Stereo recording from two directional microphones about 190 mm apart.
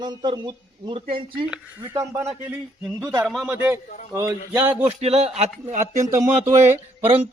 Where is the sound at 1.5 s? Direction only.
15° right (ahead or behind).